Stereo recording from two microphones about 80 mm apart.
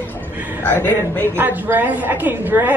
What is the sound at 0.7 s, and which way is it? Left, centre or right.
Speech, left.